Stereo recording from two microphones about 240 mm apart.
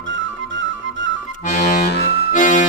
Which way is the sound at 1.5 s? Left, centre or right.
Left.